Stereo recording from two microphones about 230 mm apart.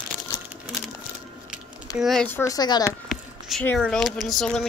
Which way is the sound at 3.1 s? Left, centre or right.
Centre.